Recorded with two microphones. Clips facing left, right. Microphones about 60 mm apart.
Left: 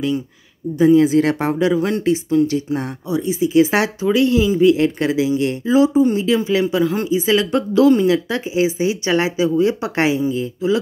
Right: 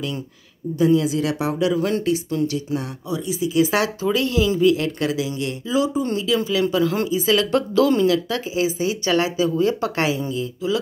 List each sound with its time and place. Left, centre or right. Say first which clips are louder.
0.7 s speech: left 6 dB; left
6.8 s speech: left 2 dB; centre
7.1 s speech: left 2 dB; left
8.1 s speech: left 3 dB; left